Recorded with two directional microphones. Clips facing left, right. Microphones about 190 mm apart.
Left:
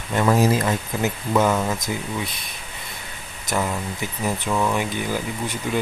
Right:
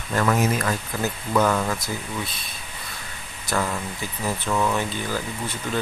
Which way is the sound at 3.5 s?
15° left (ahead or behind).